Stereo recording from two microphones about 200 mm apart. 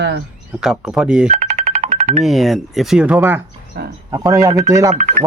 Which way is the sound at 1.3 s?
35° right (ahead or behind).